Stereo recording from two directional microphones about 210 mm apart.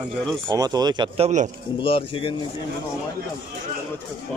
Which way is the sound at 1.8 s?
25° left (ahead or behind).